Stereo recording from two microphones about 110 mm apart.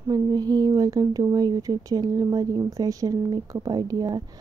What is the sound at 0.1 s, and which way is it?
Speech, 35° right (ahead or behind).